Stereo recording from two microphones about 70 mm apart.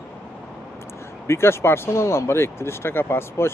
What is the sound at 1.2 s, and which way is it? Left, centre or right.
Speech, left.